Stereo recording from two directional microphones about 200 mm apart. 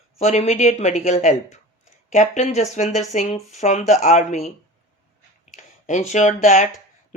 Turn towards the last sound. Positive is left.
turn(degrees=35)  # may be behind; listen again after turning